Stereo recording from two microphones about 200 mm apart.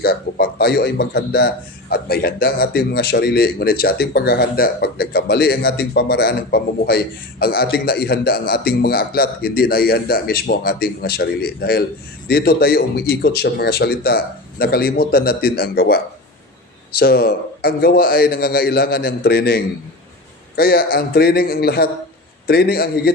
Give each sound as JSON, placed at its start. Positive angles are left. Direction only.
{"t": 0.0, "sound": "a man's voice", "side_deg": 50}
{"t": 17.0, "sound": "a man's voice", "side_deg": 50}